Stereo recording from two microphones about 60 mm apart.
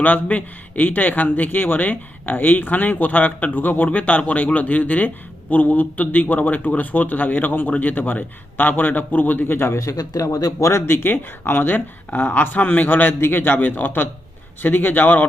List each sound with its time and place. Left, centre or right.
0.0 s speech: left
9.7 s speech: left
10.6 s speech: left